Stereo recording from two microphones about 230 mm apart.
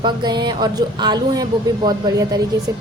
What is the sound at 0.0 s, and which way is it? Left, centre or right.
Speech, centre.